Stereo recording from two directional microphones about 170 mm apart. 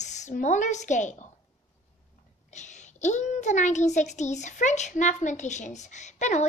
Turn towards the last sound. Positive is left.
turn(degrees=45)  # may be behind; listen again after turning